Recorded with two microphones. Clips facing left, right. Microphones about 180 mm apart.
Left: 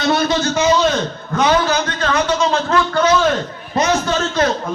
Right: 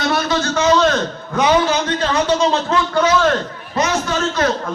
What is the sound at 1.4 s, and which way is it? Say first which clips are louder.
A man's voice: right 1 dB; 20° right (ahead or behind).